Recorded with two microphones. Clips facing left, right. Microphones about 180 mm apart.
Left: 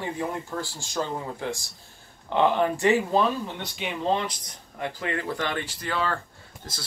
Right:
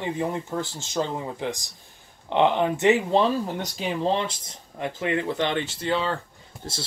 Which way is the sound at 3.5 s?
40° right (ahead or behind).